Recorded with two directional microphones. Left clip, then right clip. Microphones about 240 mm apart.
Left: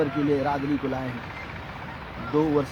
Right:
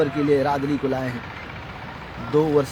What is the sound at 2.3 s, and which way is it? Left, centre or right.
Speech, right.